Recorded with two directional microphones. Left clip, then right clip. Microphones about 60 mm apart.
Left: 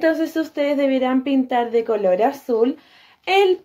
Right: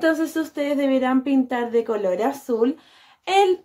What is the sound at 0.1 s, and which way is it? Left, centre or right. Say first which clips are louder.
Speech: left 2 dB; right.